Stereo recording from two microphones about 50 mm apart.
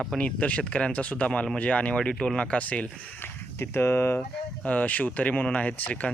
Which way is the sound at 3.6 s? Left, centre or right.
Left.